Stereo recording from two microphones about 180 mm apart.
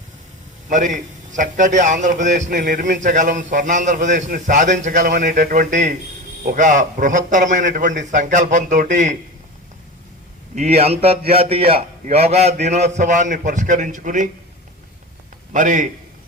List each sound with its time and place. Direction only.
0.7 s a man's voice: 45° right (ahead or behind)
10.5 s a man's voice: 35° right (ahead or behind)
15.5 s a man's voice: 45° right (ahead or behind)